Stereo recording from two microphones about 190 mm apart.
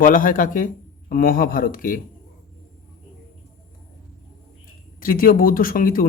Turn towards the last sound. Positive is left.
turn(degrees=50)  # may be behind; listen again after turning